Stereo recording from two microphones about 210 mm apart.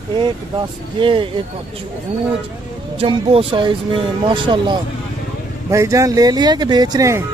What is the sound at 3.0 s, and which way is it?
A man's voice, 25° right (ahead or behind).